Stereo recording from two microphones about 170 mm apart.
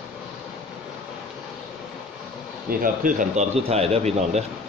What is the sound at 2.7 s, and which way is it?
Speech, 55° right (ahead or behind).